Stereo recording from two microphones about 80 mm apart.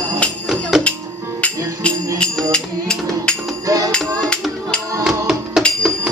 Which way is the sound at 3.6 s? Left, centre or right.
Right.